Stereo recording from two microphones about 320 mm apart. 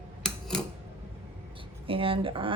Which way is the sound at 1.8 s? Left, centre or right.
Centre.